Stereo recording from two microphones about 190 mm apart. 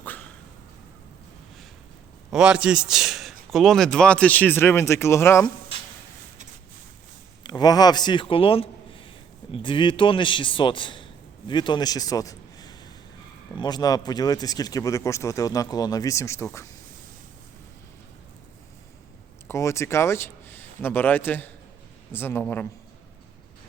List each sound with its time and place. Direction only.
0.0 s dog: 10° left (ahead or behind)
2.3 s a man's voice: 5° right (ahead or behind); by 5.5 s 15° left (ahead or behind)
7.4 s a man's voice: 20° left (ahead or behind)
19.5 s speech: 15° left (ahead or behind)